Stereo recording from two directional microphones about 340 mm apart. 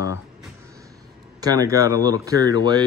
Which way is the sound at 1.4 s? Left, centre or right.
Centre.